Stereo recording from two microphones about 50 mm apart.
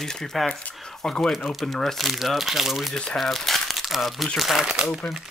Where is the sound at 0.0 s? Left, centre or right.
Centre.